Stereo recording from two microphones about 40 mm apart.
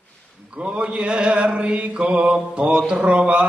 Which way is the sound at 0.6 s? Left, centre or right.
Right.